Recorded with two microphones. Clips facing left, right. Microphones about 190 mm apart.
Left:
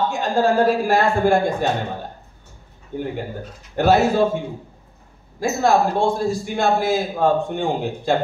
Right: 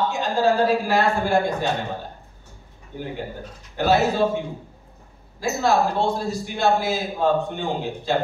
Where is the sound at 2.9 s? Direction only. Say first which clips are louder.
Left 4 dB; 50° left (ahead or behind).